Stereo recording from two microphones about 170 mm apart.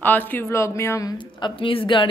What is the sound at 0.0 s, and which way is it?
Speech, 10° left (ahead or behind).